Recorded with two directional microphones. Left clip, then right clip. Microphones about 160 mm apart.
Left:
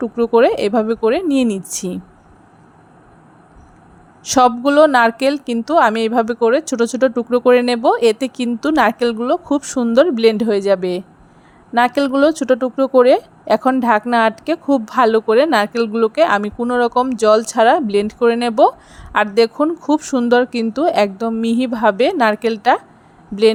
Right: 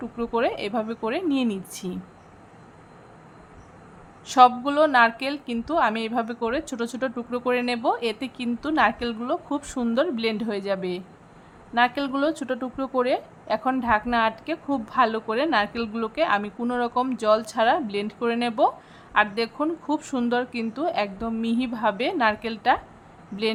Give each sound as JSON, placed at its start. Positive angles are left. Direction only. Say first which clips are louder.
{"t": 0.0, "sound": "speech", "louder": "left 12 dB", "side_deg": 35}
{"t": 4.2, "sound": "a woman's voice", "louder": "left 4 dB", "side_deg": 40}